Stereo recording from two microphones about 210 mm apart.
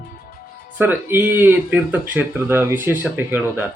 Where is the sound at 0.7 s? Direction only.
10° right (ahead or behind).